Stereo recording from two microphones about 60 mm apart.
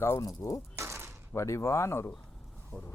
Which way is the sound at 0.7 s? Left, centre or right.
Right.